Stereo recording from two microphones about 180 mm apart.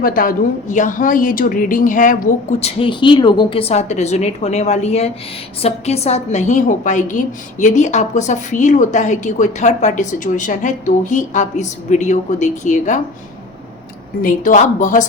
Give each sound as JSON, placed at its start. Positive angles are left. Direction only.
{"t": 0.0, "sound": "a woman's voice", "side_deg": 50}
{"t": 14.2, "sound": "a woman's voice", "side_deg": 45}